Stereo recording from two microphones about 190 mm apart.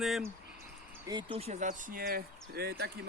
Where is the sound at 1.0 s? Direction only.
25° right (ahead or behind).